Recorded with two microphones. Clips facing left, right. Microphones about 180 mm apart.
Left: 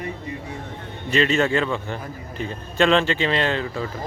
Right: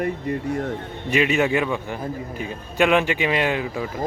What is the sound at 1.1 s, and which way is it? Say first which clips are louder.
Speech: even; 10° right (ahead or behind).